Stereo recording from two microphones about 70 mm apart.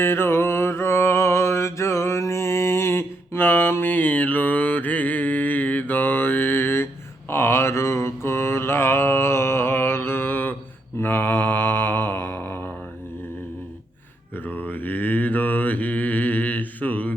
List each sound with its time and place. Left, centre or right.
0.0 s mantra: left
14.3 s mantra: left